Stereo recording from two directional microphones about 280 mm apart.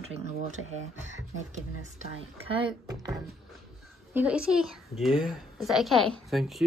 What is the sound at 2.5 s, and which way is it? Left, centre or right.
Speech, centre.